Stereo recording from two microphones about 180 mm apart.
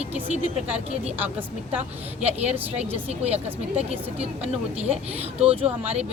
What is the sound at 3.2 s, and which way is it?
Speech, 35° right (ahead or behind).